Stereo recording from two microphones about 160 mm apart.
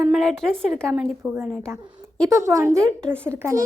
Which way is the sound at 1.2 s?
15° right (ahead or behind).